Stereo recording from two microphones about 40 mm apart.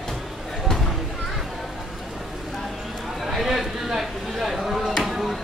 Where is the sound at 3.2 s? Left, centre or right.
Centre.